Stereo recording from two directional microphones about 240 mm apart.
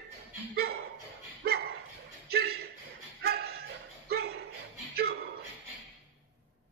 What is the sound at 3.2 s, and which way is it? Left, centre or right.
Bow-wow, right.